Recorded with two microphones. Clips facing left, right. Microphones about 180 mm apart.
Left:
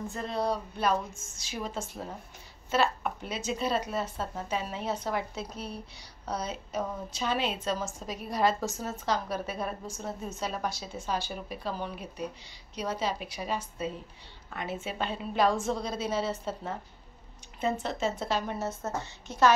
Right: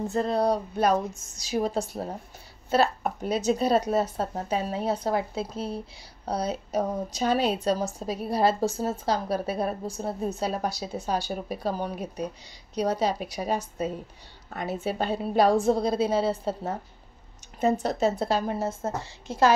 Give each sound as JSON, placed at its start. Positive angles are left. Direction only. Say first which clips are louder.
{"t": 0.0, "sound": "a woman's voice", "louder": "right 7 dB", "side_deg": -40}